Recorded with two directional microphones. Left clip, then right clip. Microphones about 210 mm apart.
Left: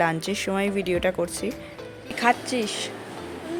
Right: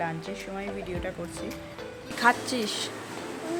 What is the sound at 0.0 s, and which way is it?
Speech, 55° left (ahead or behind).